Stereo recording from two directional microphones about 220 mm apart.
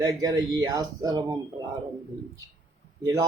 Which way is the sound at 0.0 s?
15° right (ahead or behind).